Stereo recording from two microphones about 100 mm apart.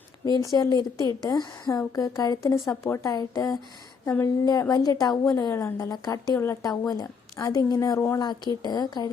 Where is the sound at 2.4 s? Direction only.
30° left (ahead or behind).